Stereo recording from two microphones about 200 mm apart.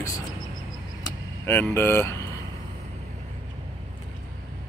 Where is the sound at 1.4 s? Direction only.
10° left (ahead or behind).